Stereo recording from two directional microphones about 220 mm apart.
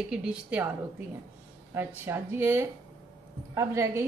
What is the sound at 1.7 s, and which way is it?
A woman's voice, 10° right (ahead or behind).